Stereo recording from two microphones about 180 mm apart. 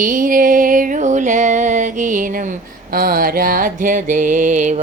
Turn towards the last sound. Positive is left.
turn(degrees=-40)  # may be behind; listen again after turning